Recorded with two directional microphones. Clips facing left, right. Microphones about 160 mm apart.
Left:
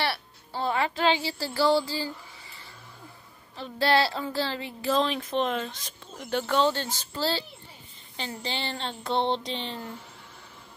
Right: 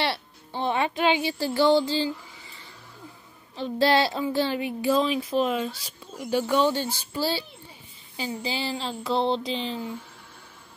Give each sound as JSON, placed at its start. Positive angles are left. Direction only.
{"t": 0.0, "sound": "speech", "side_deg": -20}
{"t": 3.5, "sound": "a woman's voice", "side_deg": -20}